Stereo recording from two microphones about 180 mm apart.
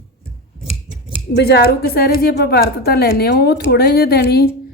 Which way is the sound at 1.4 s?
65° left (ahead or behind).